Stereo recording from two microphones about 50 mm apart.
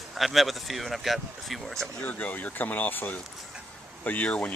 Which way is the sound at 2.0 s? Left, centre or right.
Left.